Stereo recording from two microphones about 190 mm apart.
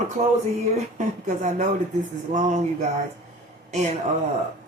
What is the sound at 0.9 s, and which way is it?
Speech, 40° right (ahead or behind).